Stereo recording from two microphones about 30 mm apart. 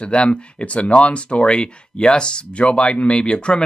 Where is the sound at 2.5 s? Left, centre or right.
Left.